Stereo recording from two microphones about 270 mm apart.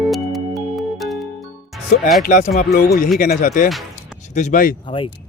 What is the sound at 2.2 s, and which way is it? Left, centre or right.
Speech, left.